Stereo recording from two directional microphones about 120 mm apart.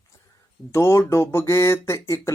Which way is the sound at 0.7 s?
25° left (ahead or behind).